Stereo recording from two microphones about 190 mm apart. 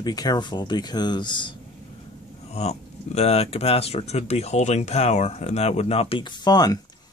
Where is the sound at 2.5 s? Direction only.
35° left (ahead or behind).